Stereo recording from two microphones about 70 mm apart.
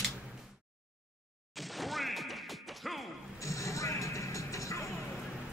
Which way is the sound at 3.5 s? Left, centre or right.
Left.